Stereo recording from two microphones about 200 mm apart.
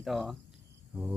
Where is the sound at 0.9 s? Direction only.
10° right (ahead or behind).